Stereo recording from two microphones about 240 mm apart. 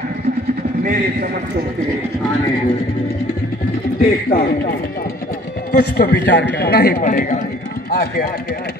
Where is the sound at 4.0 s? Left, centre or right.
Left.